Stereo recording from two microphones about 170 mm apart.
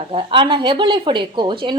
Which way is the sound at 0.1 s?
30° right (ahead or behind).